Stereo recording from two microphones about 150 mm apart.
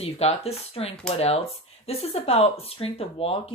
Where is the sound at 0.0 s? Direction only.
40° left (ahead or behind).